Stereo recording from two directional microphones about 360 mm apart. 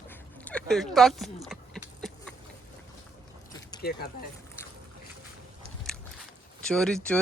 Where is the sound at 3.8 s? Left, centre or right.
Left.